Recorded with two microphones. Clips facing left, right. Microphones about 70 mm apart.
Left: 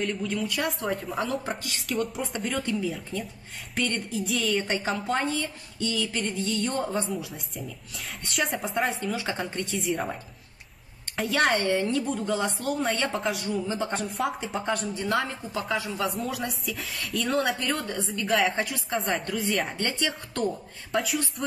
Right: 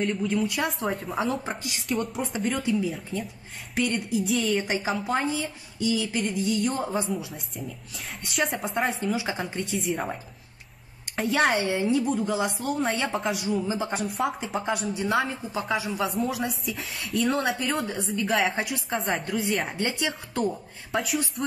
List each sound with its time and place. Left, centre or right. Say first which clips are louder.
0.0 s speech: right 3 dB; centre
1.4 s a woman's voice: even; centre
1.8 s a woman's voice: right 2 dB; centre
7.1 s speech: right 2 dB; centre
11.1 s speech: right 1 dB; centre
11.5 s a woman's voice: right 1 dB; centre
16.0 s speech: right 2 dB; centre
17.6 s a woman's voice: right 1 dB; centre
18.1 s speech: even; centre
19.8 s a woman's voice: right 1 dB; centre
20.9 s speech: even; centre